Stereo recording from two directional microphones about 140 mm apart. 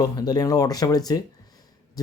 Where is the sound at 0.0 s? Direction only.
30° left (ahead or behind).